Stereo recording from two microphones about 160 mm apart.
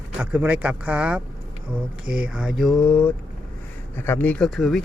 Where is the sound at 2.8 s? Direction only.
10° left (ahead or behind).